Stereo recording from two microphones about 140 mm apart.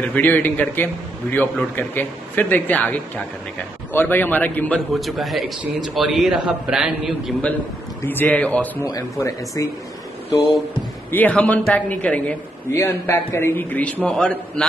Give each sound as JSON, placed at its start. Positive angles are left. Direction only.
{"t": 0.0, "sound": "a man's voice", "side_deg": 10}
{"t": 8.0, "sound": "a man's voice", "side_deg": 15}
{"t": 8.8, "sound": "speech", "side_deg": 25}
{"t": 11.1, "sound": "a man's voice", "side_deg": 10}